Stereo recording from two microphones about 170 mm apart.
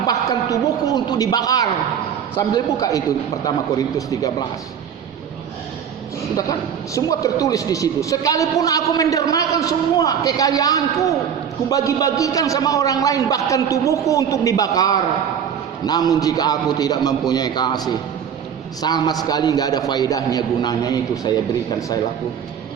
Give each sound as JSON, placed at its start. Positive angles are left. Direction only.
{"t": 0.1, "sound": "a man's voice", "side_deg": 20}
{"t": 6.3, "sound": "a man's voice", "side_deg": 20}